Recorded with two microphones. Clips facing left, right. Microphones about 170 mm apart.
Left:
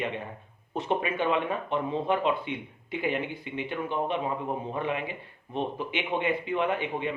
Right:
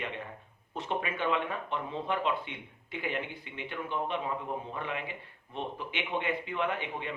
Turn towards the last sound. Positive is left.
turn(degrees=15)  # may be behind; listen again after turning